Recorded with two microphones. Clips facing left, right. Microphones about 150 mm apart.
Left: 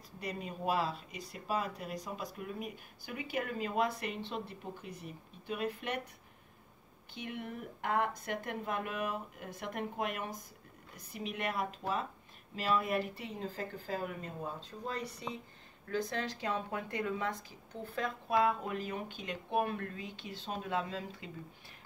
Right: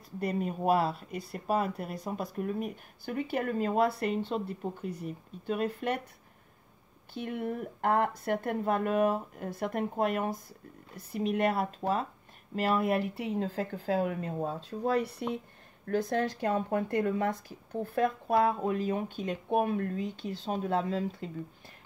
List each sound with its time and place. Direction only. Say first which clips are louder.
0.2 s speech: right 8 dB; 50° right (ahead or behind)
7.2 s speech: right 8 dB; 50° right (ahead or behind)